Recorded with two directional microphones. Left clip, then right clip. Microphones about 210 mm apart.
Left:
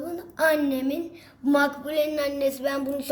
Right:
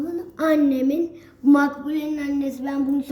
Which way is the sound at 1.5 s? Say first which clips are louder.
Right 3 dB; 45° left (ahead or behind).